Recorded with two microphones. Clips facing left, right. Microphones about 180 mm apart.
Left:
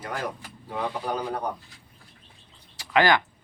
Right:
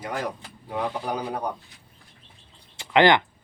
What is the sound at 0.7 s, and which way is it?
Speech, 10° right (ahead or behind).